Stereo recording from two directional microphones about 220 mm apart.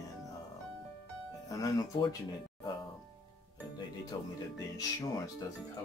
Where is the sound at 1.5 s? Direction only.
20° left (ahead or behind).